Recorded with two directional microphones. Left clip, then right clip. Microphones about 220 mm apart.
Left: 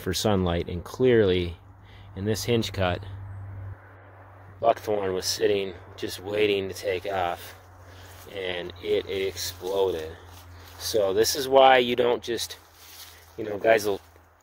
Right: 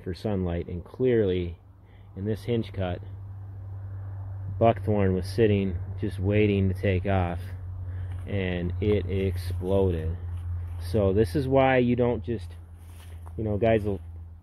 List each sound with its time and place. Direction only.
0.0 s speech: 15° left (ahead or behind)
4.6 s speech: 10° left (ahead or behind)
8.5 s speech: 10° left (ahead or behind)
13.7 s speech: 25° left (ahead or behind)